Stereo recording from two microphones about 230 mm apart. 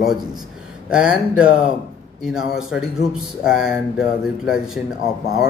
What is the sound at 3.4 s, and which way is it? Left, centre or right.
Speech, centre.